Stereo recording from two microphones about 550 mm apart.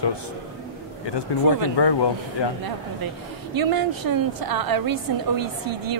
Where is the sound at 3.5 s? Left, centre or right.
Right.